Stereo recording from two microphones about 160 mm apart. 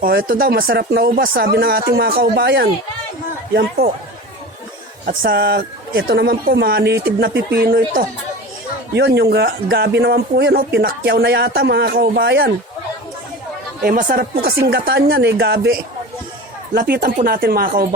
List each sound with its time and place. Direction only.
0.0 s speech: 65° right (ahead or behind); by 2.6 s 90° right
3.5 s speech: 70° right (ahead or behind)
5.0 s speech: 75° right (ahead or behind)
13.8 s speech: 60° right (ahead or behind); by 15.6 s 90° right
16.7 s speech: 70° right (ahead or behind)